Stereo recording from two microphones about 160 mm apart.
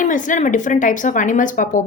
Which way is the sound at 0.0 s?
55° left (ahead or behind).